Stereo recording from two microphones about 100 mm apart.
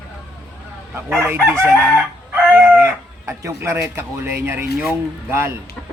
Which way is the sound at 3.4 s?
30° right (ahead or behind).